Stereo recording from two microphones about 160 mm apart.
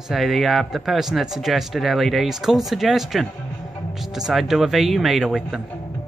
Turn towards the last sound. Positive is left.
turn(degrees=0)  # may be behind; listen again after turning